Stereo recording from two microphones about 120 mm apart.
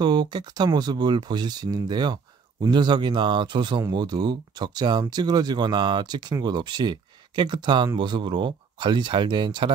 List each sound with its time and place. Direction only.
0.0 s speech: 35° right (ahead or behind)